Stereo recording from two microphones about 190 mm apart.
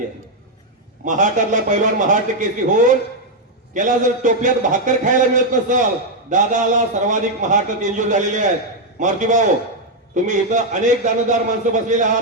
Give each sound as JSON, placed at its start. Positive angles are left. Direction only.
{"t": 1.0, "sound": "a man's voice", "side_deg": -40}